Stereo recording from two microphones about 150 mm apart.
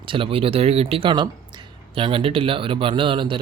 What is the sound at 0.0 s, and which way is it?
Speech, 35° right (ahead or behind).